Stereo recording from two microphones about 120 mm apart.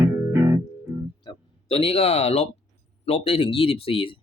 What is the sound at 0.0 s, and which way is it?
Music, 20° right (ahead or behind).